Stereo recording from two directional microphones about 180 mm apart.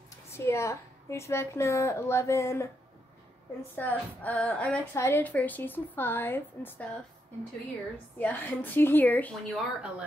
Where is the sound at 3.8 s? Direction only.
10° left (ahead or behind).